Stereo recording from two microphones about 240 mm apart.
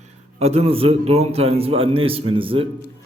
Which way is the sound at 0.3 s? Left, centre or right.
Right.